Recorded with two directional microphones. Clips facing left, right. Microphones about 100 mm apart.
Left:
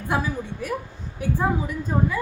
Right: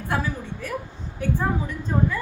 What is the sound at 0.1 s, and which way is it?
A woman's voice, 15° left (ahead or behind).